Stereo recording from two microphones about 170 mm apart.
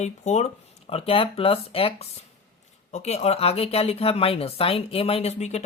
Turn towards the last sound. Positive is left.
turn(degrees=40)  # may be behind; listen again after turning